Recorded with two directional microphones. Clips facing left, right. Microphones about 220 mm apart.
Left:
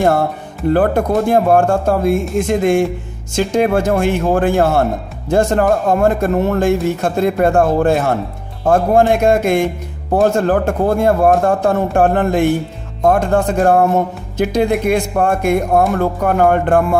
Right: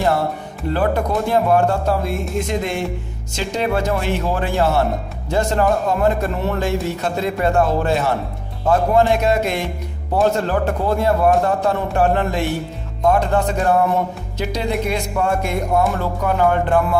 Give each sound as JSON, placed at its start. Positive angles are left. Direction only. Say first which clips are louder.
{"t": 0.7, "sound": "speech", "louder": "left 6 dB", "side_deg": 50}